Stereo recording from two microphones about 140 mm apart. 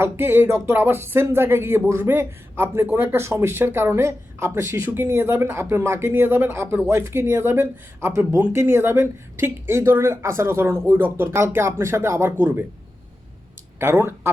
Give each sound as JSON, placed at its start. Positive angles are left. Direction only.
{"t": 0.0, "sound": "speech", "side_deg": -15}
{"t": 13.7, "sound": "speech", "side_deg": -15}